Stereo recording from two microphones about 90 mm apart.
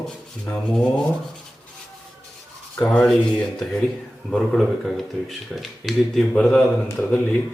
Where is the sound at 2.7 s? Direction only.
15° left (ahead or behind).